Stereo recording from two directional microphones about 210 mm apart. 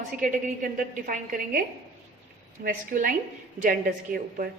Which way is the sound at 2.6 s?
40° right (ahead or behind).